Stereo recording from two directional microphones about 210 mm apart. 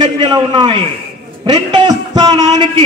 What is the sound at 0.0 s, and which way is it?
A man's voice, 20° right (ahead or behind).